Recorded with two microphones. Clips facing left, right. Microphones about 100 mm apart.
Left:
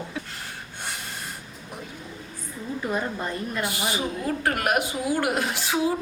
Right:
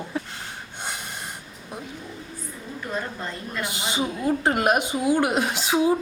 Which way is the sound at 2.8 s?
15° left (ahead or behind).